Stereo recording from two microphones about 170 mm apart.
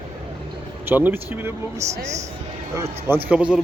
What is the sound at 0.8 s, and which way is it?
A man's voice, 10° right (ahead or behind).